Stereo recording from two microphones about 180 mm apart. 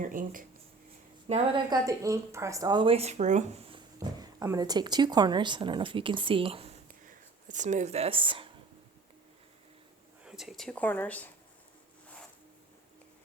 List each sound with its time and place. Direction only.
0.0 s speech: 50° right (ahead or behind)
1.3 s speech: 25° right (ahead or behind)
7.0 s speech: 45° right (ahead or behind); by 8.4 s 30° right (ahead or behind)
10.2 s speech: centre (ahead or behind)